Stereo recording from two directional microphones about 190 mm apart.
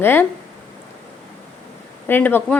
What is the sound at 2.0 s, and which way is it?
Speech, 10° left (ahead or behind).